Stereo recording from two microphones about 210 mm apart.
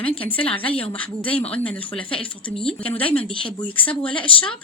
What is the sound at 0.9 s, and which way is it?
Speech, 5° left (ahead or behind).